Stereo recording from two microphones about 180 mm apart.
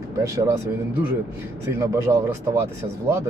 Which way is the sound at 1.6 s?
15° right (ahead or behind).